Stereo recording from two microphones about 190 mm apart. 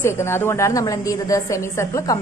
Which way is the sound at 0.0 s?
15° left (ahead or behind).